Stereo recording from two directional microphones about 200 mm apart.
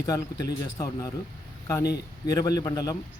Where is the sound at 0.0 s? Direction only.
15° left (ahead or behind).